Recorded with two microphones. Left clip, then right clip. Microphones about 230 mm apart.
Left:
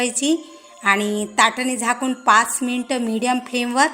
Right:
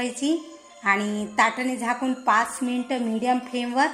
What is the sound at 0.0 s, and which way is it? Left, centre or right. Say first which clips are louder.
A woman's voice: left 5 dB; left.